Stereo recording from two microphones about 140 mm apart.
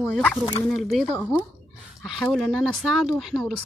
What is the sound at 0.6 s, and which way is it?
Speech, centre (ahead or behind).